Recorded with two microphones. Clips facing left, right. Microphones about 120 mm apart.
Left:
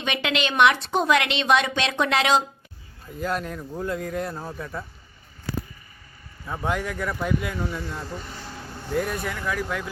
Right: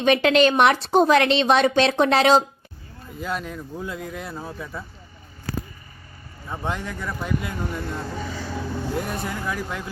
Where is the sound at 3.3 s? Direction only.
45° left (ahead or behind).